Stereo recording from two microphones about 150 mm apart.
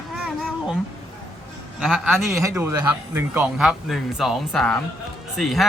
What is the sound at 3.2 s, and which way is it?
A man's voice, 10° right (ahead or behind).